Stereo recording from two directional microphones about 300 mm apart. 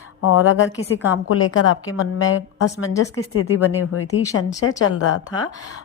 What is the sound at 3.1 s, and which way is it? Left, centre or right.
A woman's voice, left.